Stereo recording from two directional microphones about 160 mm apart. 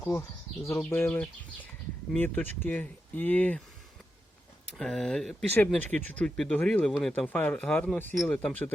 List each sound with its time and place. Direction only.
0.0 s speech: 15° left (ahead or behind)
4.8 s speech: centre (ahead or behind)